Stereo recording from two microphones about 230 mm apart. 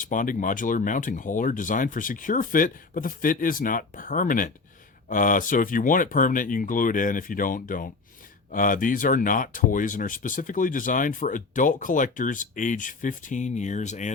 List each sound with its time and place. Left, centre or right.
0.0 s speech: left